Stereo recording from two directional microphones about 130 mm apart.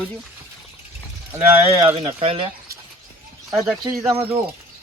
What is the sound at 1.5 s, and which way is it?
Speech, 15° right (ahead or behind).